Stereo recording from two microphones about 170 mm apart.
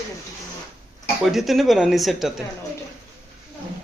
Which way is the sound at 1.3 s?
Centre (ahead or behind).